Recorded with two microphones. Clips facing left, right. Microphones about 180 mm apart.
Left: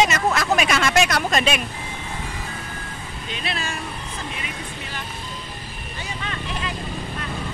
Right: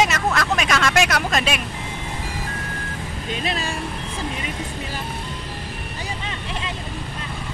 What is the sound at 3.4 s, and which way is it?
Speech, 40° right (ahead or behind).